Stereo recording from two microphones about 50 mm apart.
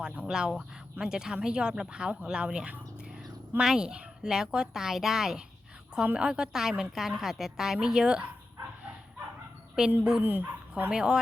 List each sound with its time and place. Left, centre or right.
0.3 s speech: centre
10.0 s speech: centre
10.2 s speech: right
10.9 s speech: centre